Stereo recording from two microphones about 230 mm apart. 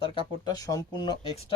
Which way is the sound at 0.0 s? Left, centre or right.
Centre.